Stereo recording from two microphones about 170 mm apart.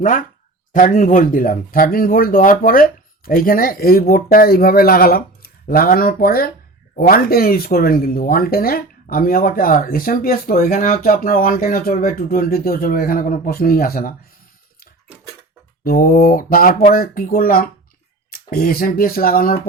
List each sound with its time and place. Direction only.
0.0 s speech: 50° left (ahead or behind)
15.8 s speech: 60° left (ahead or behind)